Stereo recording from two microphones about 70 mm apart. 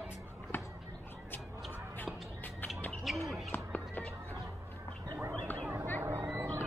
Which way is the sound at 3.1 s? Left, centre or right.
Centre.